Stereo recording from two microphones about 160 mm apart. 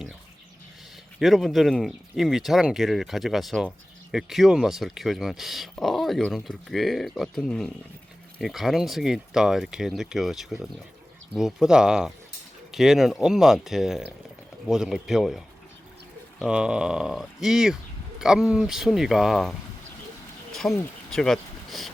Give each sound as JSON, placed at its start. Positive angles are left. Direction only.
{"t": 1.2, "sound": "speech", "side_deg": 0}